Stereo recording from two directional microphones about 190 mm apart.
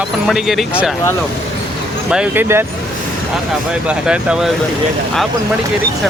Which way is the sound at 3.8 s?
5° right (ahead or behind).